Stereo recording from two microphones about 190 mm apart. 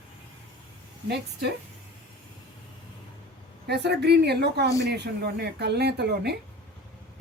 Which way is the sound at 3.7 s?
60° right (ahead or behind).